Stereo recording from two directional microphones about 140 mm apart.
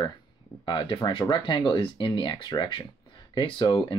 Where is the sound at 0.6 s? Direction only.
35° left (ahead or behind).